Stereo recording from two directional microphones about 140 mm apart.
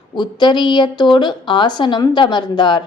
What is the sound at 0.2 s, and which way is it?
A woman's voice, 30° left (ahead or behind).